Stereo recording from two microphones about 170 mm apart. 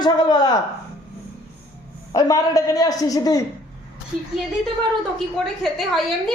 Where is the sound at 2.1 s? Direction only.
20° left (ahead or behind).